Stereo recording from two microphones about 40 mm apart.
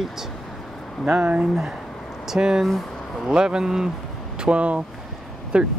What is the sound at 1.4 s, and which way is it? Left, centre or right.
Speech, centre.